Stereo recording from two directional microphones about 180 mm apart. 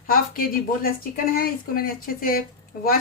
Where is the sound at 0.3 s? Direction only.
55° left (ahead or behind).